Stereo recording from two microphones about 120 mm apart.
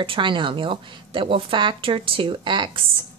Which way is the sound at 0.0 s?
45° right (ahead or behind).